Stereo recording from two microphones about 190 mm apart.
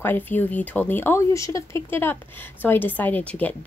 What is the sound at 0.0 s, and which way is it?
A woman's voice, 10° left (ahead or behind).